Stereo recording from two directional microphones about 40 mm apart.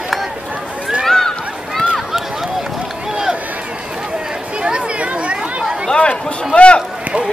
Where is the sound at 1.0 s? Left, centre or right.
Centre.